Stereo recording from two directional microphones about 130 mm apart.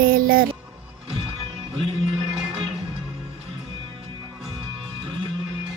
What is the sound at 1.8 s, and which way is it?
Music, 40° right (ahead or behind).